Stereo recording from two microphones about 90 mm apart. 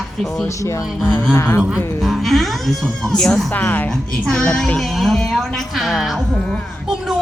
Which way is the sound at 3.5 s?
20° left (ahead or behind).